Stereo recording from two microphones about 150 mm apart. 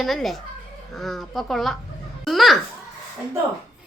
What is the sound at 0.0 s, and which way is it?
A child's voice, centre (ahead or behind).